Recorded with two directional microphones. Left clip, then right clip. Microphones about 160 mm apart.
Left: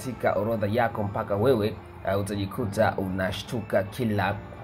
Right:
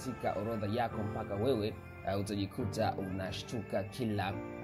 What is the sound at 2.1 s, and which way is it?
Speech, 40° right (ahead or behind).